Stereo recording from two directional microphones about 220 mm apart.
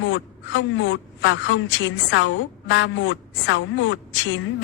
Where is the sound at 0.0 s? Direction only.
60° left (ahead or behind).